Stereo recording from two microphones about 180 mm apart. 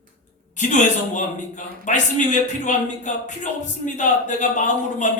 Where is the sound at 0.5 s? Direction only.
45° left (ahead or behind).